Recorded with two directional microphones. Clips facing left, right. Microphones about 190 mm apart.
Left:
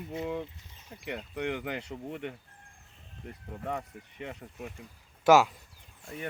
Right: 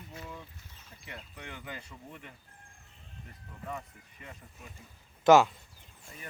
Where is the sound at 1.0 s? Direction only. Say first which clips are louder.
Left 13 dB; 70° left (ahead or behind).